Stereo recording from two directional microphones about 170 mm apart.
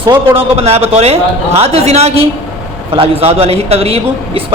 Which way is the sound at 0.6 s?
35° right (ahead or behind).